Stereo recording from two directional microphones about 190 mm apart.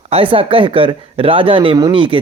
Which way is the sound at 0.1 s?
30° right (ahead or behind).